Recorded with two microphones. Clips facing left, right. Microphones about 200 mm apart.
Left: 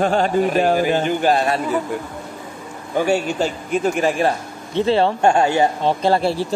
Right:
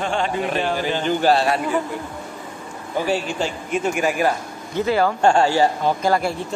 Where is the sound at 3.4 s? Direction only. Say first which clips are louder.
Left 3 dB; 35° left (ahead or behind).